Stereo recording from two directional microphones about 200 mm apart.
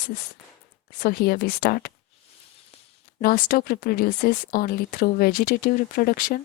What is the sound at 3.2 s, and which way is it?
A woman's voice, 45° left (ahead or behind).